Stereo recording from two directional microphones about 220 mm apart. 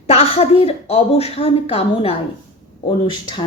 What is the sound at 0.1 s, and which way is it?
A woman's voice, 25° left (ahead or behind).